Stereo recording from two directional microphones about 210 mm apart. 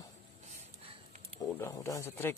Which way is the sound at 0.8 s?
30° right (ahead or behind).